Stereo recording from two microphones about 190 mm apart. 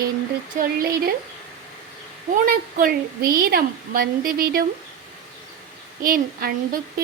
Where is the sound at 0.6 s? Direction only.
50° right (ahead or behind).